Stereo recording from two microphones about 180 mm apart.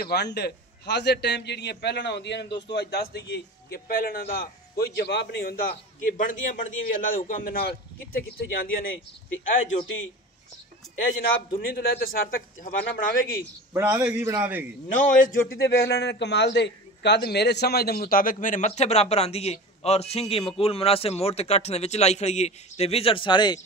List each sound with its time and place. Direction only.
0.0 s a man's voice: 65° left (ahead or behind)
11.5 s a man's voice: 55° left (ahead or behind)
13.7 s a man's voice: 10° right (ahead or behind)
15.0 s a man's voice: 45° left (ahead or behind); by 23.6 s 25° left (ahead or behind)